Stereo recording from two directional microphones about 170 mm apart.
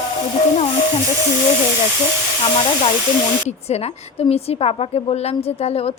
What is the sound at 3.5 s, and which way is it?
A woman's voice, 40° left (ahead or behind).